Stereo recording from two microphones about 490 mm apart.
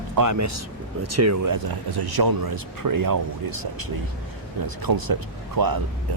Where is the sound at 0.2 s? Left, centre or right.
Right.